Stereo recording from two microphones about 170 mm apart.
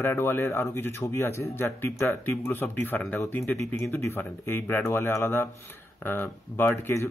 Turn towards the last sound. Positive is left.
turn(degrees=15)  # may be behind; listen again after turning